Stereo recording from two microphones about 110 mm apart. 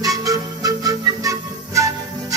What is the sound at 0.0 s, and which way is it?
Music, 35° right (ahead or behind).